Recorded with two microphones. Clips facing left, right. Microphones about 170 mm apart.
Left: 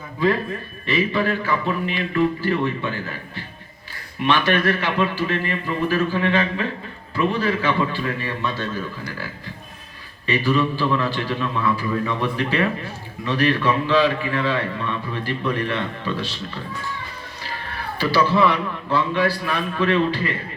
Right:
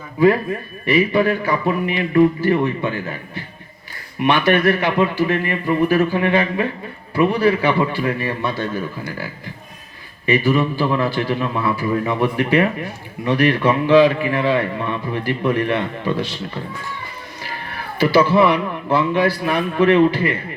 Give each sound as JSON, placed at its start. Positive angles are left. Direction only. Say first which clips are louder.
{"t": 0.9, "sound": "a man's voice", "louder": "right 5 dB", "side_deg": -20}
{"t": 10.2, "sound": "a man's voice", "louder": "right 3 dB", "side_deg": -20}
{"t": 17.9, "sound": "speech", "louder": "right 5 dB", "side_deg": -20}